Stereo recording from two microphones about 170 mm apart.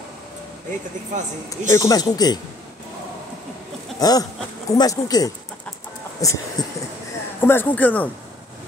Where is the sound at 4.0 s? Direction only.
20° left (ahead or behind).